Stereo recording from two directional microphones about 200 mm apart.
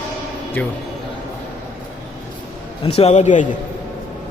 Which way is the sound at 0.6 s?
10° left (ahead or behind).